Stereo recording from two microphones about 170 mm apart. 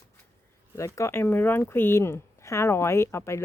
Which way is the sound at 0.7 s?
15° left (ahead or behind).